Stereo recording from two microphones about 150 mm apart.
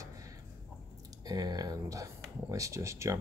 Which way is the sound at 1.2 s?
25° right (ahead or behind).